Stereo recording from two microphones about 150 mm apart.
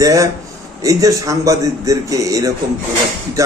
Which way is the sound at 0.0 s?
25° right (ahead or behind).